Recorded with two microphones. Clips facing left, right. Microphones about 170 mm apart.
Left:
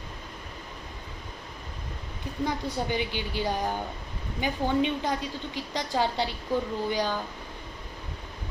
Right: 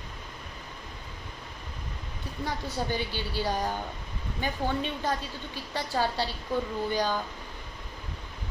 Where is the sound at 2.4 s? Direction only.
15° left (ahead or behind).